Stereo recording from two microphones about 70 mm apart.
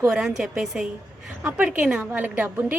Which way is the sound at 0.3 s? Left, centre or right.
Centre.